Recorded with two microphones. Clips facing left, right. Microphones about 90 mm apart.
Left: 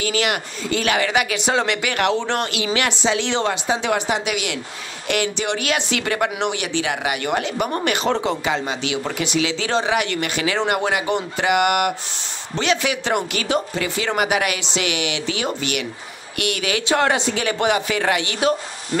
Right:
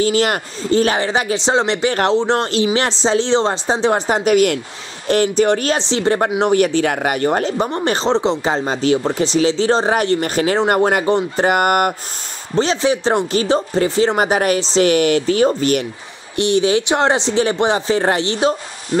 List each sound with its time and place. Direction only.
0.0 s speech: 35° right (ahead or behind)
16.3 s speech: 25° right (ahead or behind)